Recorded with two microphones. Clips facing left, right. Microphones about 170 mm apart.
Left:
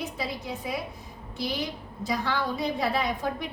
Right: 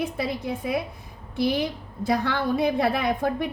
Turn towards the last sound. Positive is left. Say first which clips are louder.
# right 5 dB
turn(degrees=-50)  # may be behind; listen again after turning